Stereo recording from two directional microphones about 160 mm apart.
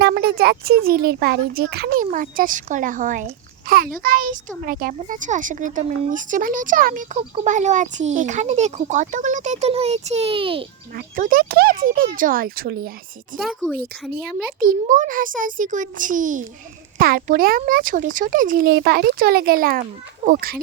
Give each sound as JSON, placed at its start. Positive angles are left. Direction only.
{"t": 0.0, "sound": "a child's voice", "side_deg": -80}
{"t": 10.9, "sound": "speech", "side_deg": -60}
{"t": 13.3, "sound": "speech", "side_deg": 0}
{"t": 14.6, "sound": "a child's voice", "side_deg": -55}